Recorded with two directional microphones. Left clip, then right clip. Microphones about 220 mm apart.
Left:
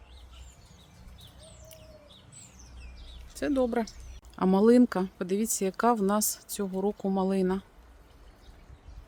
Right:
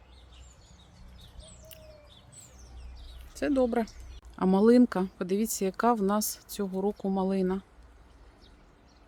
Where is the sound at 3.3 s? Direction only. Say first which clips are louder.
Right 1 dB; 10° right (ahead or behind).